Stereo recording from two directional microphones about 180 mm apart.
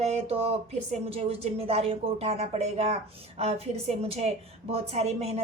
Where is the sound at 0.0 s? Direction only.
35° right (ahead or behind).